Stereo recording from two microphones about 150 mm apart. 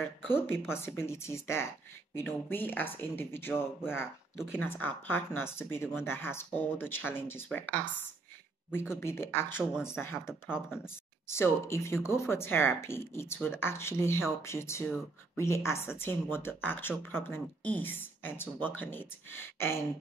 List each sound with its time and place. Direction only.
0.3 s speech: 15° left (ahead or behind)
8.9 s speech: 15° left (ahead or behind)